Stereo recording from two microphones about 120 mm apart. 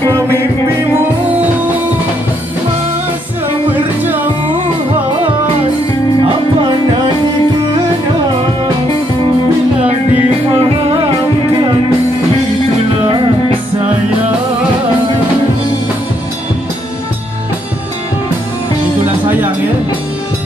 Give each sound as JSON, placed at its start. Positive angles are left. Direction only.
{"t": 0.1, "sound": "music", "side_deg": -20}
{"t": 3.7, "sound": "music", "side_deg": -15}
{"t": 10.1, "sound": "music", "side_deg": -55}
{"t": 13.0, "sound": "music", "side_deg": -50}